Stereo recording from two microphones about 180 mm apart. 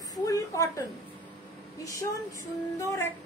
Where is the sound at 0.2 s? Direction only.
15° left (ahead or behind).